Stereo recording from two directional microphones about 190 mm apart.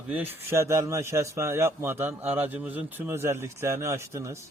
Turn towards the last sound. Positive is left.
turn(degrees=-15)  # may be behind; listen again after turning